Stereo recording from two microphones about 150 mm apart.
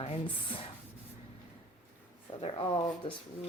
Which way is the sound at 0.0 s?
40° left (ahead or behind).